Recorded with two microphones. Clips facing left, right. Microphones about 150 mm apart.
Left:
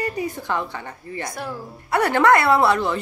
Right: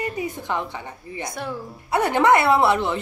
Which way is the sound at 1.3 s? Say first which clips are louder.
Right 1 dB; 5° left (ahead or behind).